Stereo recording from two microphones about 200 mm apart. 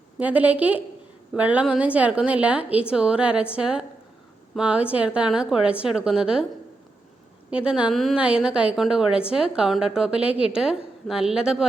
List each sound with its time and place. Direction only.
0.2 s a woman's voice: 5° right (ahead or behind)
7.5 s a woman's voice: 5° right (ahead or behind)